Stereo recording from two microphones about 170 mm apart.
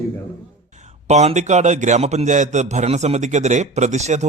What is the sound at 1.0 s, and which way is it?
A man's voice, 40° right (ahead or behind).